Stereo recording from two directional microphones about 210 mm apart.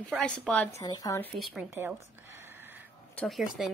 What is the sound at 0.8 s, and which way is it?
Speech, 15° left (ahead or behind).